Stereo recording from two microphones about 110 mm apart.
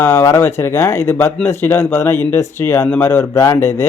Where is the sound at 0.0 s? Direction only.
25° left (ahead or behind).